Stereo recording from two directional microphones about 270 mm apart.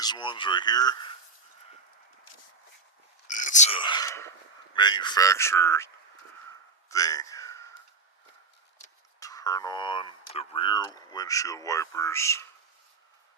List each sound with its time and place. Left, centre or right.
0.0 s speech: centre
3.2 s speech: left; by 5.9 s centre
6.8 s a sound: centre
9.2 s speech: centre